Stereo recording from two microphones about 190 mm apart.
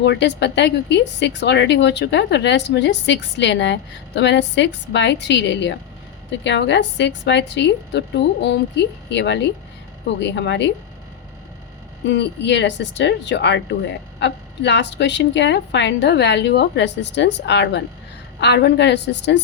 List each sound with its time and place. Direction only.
0.0 s a woman's voice: 65° left (ahead or behind)
12.0 s a woman's voice: 65° left (ahead or behind)